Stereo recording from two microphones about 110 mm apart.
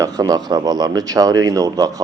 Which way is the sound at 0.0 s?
35° right (ahead or behind).